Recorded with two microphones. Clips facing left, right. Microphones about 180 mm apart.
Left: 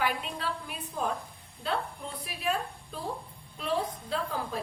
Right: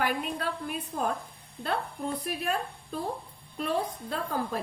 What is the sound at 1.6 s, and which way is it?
A woman's voice, 45° right (ahead or behind).